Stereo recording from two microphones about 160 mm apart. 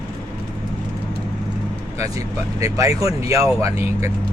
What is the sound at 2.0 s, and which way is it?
Speech, 20° right (ahead or behind).